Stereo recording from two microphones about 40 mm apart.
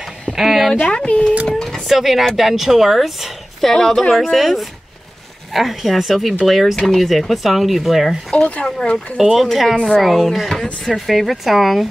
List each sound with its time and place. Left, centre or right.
0.3 s speech: centre
0.8 s speech: left
1.5 s a sound: centre
1.9 s speech: centre
3.7 s speech: centre
4.3 s speech: centre
8.6 s speech: centre
9.2 s speech: centre